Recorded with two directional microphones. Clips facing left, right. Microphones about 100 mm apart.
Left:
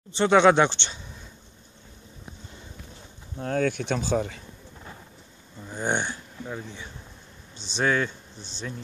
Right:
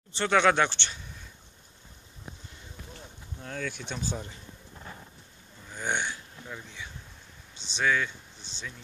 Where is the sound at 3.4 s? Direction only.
50° left (ahead or behind); by 4.4 s 80° left.